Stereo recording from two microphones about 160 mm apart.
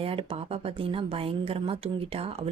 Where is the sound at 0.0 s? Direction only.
35° right (ahead or behind).